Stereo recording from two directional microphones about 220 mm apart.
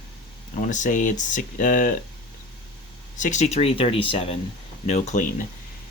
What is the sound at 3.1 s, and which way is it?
Speech, 35° left (ahead or behind).